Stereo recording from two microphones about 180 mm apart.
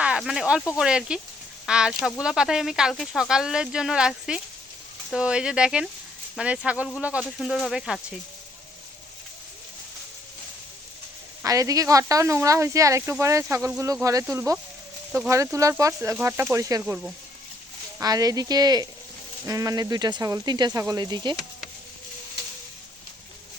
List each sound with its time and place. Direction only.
0.0 s speech: 5° right (ahead or behind)
11.4 s speech: 20° right (ahead or behind)
16.8 s speech: 5° right (ahead or behind)
18.0 s speech: 20° right (ahead or behind)